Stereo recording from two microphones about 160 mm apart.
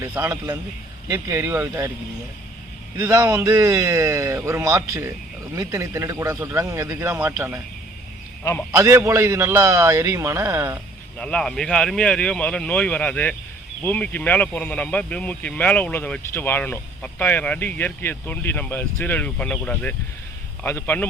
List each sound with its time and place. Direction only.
0.0 s speech: 15° right (ahead or behind)
3.0 s speech: 20° right (ahead or behind)
8.7 s speech: 15° right (ahead or behind)
11.2 s speech: 5° left (ahead or behind)